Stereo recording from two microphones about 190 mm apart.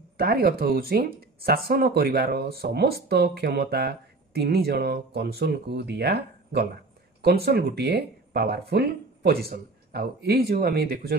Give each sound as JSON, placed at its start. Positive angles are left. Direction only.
{"t": 0.2, "sound": "speech", "side_deg": -55}